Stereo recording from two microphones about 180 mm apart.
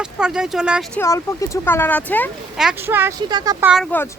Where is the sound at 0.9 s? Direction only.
15° left (ahead or behind).